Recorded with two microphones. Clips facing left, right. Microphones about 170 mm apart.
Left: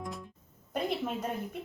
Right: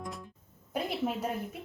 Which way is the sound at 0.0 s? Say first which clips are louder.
Left 1 dB; centre (ahead or behind).